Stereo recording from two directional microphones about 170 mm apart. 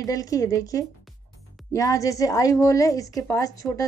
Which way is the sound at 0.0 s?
20° left (ahead or behind).